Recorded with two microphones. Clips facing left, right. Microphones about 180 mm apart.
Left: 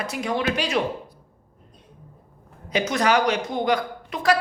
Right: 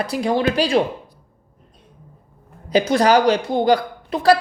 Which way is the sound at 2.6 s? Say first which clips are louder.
Right 6 dB; 30° right (ahead or behind).